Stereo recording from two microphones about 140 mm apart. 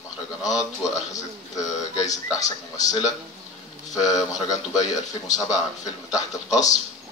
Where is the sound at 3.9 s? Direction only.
25° left (ahead or behind).